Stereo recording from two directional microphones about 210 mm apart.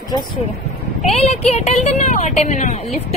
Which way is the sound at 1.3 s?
30° left (ahead or behind).